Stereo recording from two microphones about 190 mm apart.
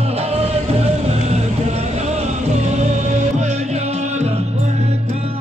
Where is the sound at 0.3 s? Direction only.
35° right (ahead or behind).